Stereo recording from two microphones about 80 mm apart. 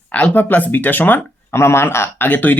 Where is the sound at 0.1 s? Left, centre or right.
Centre.